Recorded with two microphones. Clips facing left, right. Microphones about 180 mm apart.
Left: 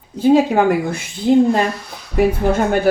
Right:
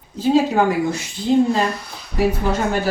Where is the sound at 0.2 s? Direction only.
55° left (ahead or behind).